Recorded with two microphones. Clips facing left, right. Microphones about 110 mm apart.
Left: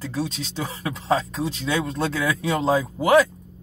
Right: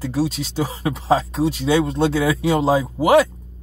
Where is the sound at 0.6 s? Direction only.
30° right (ahead or behind).